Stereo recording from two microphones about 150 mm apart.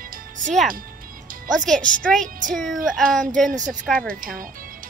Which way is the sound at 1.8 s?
65° right (ahead or behind).